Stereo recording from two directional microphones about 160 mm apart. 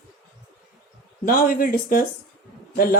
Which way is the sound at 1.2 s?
65° left (ahead or behind).